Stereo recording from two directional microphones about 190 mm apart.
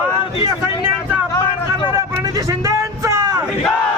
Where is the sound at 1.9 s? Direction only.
20° right (ahead or behind).